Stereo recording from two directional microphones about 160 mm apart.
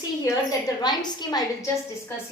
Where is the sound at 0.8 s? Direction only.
25° left (ahead or behind).